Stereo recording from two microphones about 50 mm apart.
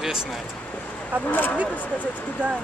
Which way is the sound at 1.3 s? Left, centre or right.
Left.